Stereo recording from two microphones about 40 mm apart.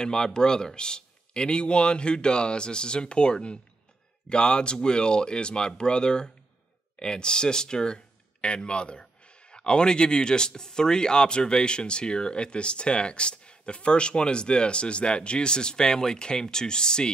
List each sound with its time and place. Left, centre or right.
0.0 s speech: centre